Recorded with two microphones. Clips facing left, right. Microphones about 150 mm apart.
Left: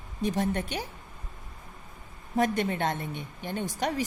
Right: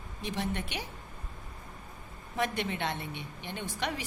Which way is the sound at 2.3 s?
45° left (ahead or behind).